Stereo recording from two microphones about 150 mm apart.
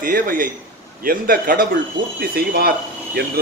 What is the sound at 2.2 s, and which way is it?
Speech, 90° right.